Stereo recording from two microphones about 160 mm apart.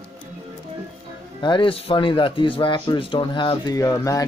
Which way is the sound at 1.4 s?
30° left (ahead or behind).